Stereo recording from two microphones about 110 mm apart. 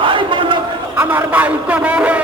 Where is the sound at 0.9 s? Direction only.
15° right (ahead or behind).